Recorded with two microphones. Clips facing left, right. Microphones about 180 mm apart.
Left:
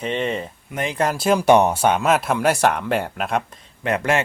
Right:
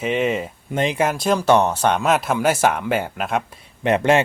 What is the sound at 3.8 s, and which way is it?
Speech, 20° right (ahead or behind).